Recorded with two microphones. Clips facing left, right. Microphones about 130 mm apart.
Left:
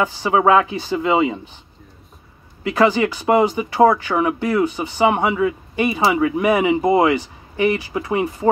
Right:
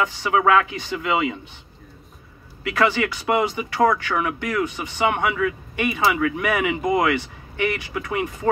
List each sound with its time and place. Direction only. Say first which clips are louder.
0.0 s speech: left 3 dB; 35° left (ahead or behind)
2.6 s speech: left 5 dB; 30° left (ahead or behind)